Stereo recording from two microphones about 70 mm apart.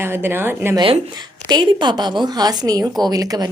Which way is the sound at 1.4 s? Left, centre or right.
Right.